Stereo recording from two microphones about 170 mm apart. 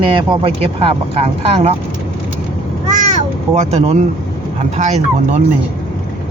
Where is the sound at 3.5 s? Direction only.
40° right (ahead or behind).